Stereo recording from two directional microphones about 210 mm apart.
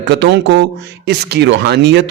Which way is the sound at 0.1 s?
55° right (ahead or behind).